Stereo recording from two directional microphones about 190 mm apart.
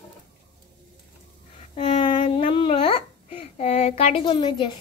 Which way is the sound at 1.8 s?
25° left (ahead or behind).